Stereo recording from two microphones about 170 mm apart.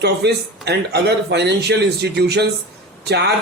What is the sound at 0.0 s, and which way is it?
Speech, 75° right (ahead or behind).